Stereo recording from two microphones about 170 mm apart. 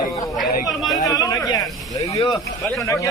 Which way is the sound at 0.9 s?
20° left (ahead or behind).